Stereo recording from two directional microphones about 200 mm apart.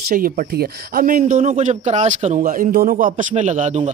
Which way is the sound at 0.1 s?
45° right (ahead or behind).